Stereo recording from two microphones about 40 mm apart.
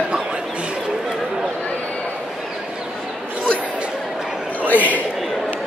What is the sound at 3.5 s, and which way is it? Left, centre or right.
Chatter, right.